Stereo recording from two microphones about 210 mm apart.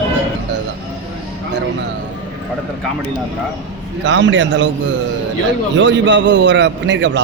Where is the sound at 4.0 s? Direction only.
60° right (ahead or behind).